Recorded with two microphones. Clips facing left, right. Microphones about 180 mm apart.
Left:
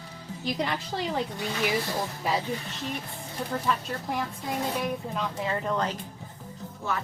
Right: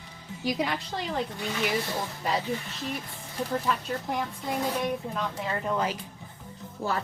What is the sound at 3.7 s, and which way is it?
A woman's voice, centre (ahead or behind).